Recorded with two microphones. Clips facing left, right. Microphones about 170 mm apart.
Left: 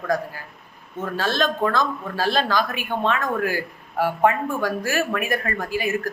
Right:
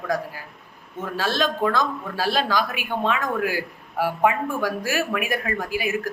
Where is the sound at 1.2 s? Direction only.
10° right (ahead or behind).